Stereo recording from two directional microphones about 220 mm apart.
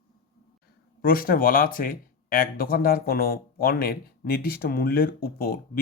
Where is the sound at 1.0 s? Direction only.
40° left (ahead or behind).